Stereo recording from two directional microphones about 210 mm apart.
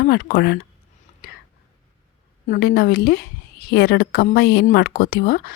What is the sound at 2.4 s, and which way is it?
A woman's voice, 45° left (ahead or behind).